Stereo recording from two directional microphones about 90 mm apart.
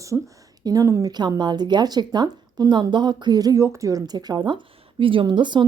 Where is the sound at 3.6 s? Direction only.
35° right (ahead or behind); by 5.6 s 60° right (ahead or behind).